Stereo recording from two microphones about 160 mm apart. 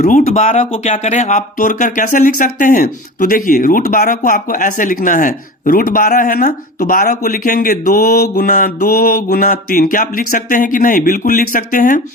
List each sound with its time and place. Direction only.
0.0 s speech: 50° left (ahead or behind)